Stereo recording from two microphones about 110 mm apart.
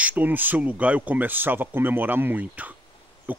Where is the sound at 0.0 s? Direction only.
15° right (ahead or behind).